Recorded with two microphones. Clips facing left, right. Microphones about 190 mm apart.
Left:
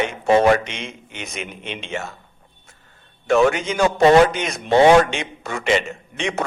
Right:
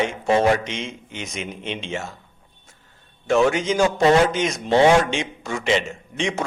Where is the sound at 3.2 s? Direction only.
60° left (ahead or behind).